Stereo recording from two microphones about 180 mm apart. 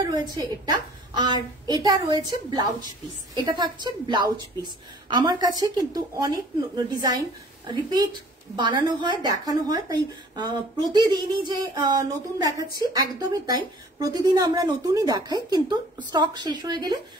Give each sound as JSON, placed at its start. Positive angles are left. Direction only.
{"t": 0.1, "sound": "speech", "side_deg": -25}